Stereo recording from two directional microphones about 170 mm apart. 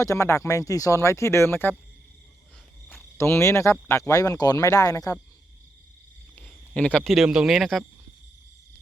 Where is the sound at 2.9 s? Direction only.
15° left (ahead or behind).